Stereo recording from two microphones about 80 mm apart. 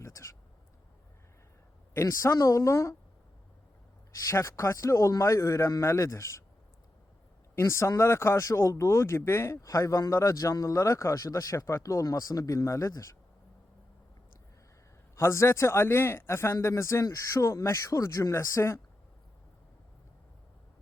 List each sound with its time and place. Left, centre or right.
0.0 s a sound: left
2.0 s speech: left
4.3 s speech: left
7.5 s speech: left
15.1 s speech: left